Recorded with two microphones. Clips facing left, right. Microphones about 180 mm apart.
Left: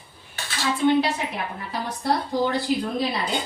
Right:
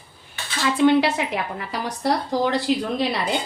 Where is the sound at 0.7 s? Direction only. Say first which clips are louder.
Right 3 dB; 80° right.